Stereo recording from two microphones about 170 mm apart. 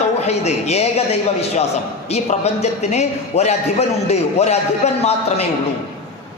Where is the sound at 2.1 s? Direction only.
40° left (ahead or behind).